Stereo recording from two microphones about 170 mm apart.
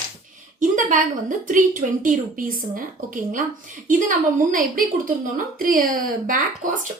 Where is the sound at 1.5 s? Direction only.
50° right (ahead or behind).